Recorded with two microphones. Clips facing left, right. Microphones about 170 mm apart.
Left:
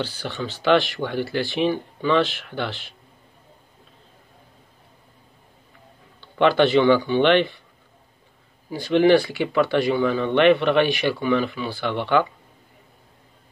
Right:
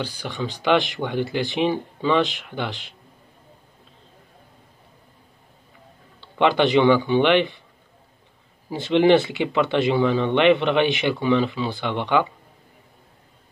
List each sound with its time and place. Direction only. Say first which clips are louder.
0.0 s speech: even; 15° right (ahead or behind)
6.3 s speech: left 1 dB; 15° right (ahead or behind)
8.6 s speech: even; 25° right (ahead or behind)